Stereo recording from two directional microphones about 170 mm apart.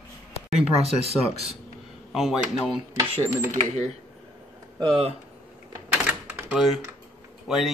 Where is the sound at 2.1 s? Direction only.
Centre (ahead or behind).